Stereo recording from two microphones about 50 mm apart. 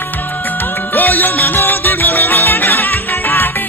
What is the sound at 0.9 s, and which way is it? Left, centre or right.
Music, left.